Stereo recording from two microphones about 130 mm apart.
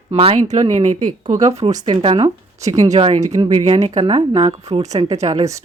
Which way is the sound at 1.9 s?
45° right (ahead or behind).